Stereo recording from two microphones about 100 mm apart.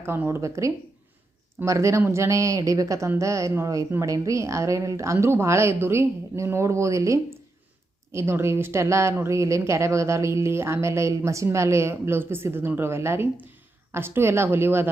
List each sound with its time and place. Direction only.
0.0 s speech: 25° right (ahead or behind)